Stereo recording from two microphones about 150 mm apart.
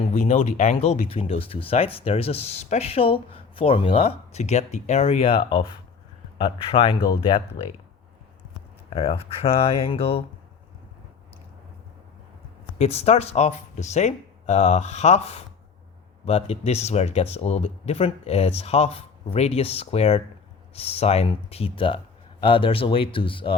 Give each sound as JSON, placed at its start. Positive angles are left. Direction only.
{"t": 0.1, "sound": "speech", "side_deg": 50}
{"t": 8.9, "sound": "speech", "side_deg": 40}
{"t": 12.8, "sound": "speech", "side_deg": 45}